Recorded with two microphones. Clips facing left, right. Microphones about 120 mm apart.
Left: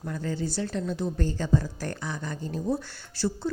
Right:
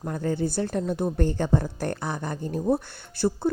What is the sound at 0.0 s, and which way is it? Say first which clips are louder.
A woman's voice: right 5 dB; 45° right (ahead or behind).